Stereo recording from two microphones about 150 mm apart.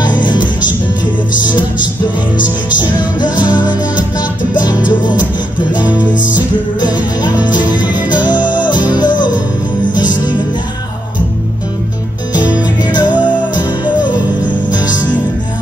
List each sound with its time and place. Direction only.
0.2 s music: 30° left (ahead or behind)
2.8 s music: 30° left (ahead or behind)
5.8 s music: 10° right (ahead or behind)
6.3 s music: 30° left (ahead or behind)
7.2 s music: 10° right (ahead or behind)
8.3 s music: 30° left (ahead or behind)
12.4 s music: 10° right (ahead or behind)
12.8 s music: 30° left (ahead or behind)